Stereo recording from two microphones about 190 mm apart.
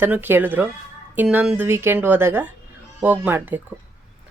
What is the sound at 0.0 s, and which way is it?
Speech, 10° right (ahead or behind).